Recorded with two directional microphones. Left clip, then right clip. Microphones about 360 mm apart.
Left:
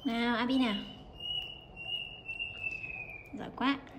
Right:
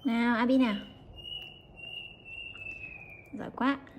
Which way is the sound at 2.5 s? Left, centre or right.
Centre.